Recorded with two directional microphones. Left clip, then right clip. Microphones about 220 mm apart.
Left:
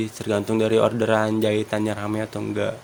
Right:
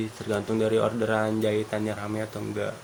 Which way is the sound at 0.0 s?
45° left (ahead or behind).